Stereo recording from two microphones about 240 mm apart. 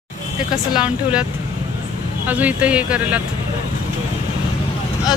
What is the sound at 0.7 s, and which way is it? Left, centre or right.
Speech, centre.